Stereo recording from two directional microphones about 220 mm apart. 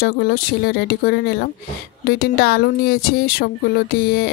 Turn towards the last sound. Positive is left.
turn(degrees=45)  # may be behind; listen again after turning